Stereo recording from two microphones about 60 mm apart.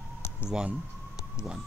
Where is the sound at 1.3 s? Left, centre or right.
Centre.